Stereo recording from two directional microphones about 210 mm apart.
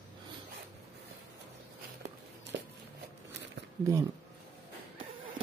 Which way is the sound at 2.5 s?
55° right (ahead or behind).